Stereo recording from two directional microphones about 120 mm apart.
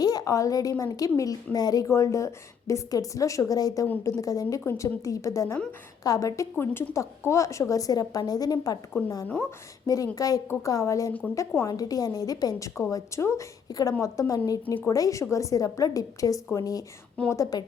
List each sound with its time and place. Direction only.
0.0 s a woman's voice: 35° left (ahead or behind)
9.2 s a woman's voice: 15° left (ahead or behind)
9.8 s a woman's voice: 30° left (ahead or behind)